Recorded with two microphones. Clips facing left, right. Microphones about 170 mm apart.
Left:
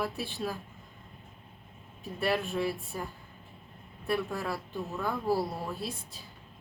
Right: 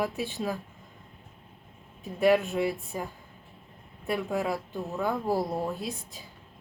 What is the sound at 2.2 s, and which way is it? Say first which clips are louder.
Speech: right 7 dB; 15° right (ahead or behind).